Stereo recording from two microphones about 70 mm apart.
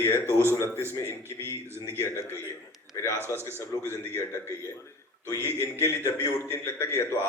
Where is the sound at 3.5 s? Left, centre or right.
Left.